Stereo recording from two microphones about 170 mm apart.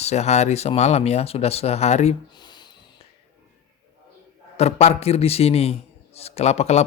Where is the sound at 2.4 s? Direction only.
25° left (ahead or behind).